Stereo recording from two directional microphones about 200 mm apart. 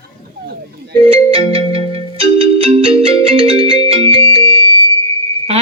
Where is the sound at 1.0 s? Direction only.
30° right (ahead or behind).